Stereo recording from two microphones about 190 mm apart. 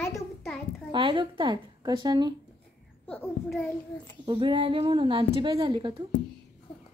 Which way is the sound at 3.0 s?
5° left (ahead or behind).